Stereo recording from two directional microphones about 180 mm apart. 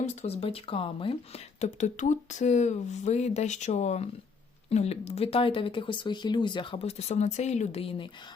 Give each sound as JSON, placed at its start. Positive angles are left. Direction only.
{"t": 0.0, "sound": "speech", "side_deg": 35}